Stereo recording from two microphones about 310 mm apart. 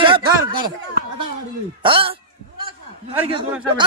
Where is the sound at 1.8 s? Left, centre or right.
Centre.